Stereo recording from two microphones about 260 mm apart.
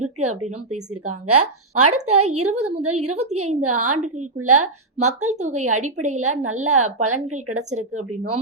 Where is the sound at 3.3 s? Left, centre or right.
Right.